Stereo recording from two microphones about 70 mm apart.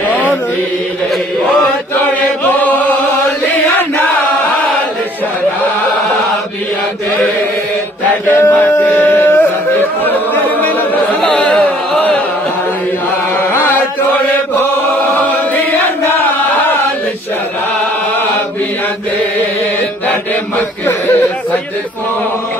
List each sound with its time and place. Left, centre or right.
2.0 s chant: left
8.3 s a sound: left
11.1 s carnatic music: centre
13.7 s chant: left
15.1 s choir: left
16.0 s chant: left
20.5 s a sound: left